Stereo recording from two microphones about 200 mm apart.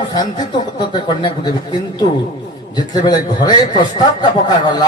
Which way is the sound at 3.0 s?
20° left (ahead or behind).